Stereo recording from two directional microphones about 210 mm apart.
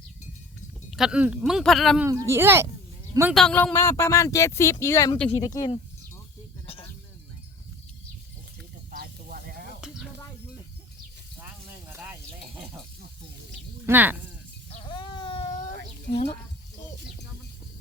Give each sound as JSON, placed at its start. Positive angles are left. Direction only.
{"t": 0.9, "sound": "speech", "side_deg": 0}
{"t": 2.0, "sound": "speech", "side_deg": -15}
{"t": 3.3, "sound": "speech", "side_deg": 5}
{"t": 8.9, "sound": "snake", "side_deg": -45}
{"t": 9.8, "sound": "a sound", "side_deg": -5}
{"t": 11.9, "sound": "a sound", "side_deg": -10}
{"t": 13.8, "sound": "speech", "side_deg": -10}
{"t": 14.7, "sound": "baby cry", "side_deg": 25}
{"t": 16.1, "sound": "speech", "side_deg": 40}